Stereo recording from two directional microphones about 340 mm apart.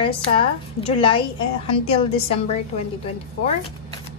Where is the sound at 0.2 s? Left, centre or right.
Centre.